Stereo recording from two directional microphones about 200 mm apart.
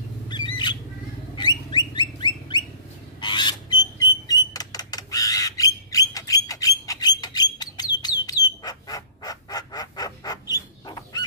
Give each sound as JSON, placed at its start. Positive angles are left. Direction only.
{"t": 1.3, "sound": "a sound", "side_deg": 20}
{"t": 2.0, "sound": "bird", "side_deg": 20}
{"t": 3.2, "sound": "rodents", "side_deg": 20}
{"t": 8.0, "sound": "bird", "side_deg": 20}